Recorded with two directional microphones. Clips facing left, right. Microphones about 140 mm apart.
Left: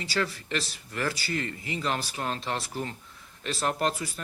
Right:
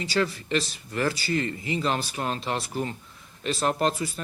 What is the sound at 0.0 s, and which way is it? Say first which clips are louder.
Speech: right 4 dB; 20° right (ahead or behind).